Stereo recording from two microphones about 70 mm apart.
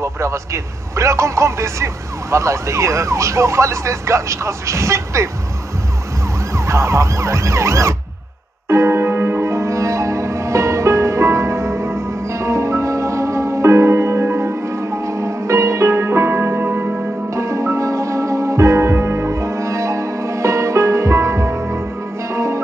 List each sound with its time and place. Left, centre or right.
0.0 s speech: right
6.5 s police car: right
8.6 s music: right
17.3 s music: right